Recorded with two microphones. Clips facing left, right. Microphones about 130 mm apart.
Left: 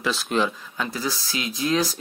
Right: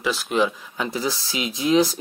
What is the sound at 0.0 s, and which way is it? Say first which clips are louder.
Speech: right 2 dB; 10° right (ahead or behind).